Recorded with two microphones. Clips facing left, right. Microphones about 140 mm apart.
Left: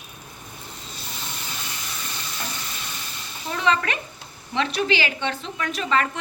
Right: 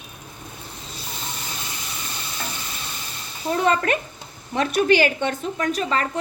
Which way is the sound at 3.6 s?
50° right (ahead or behind).